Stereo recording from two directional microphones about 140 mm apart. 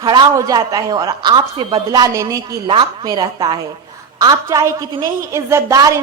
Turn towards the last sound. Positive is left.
turn(degrees=-25)  # may be behind; listen again after turning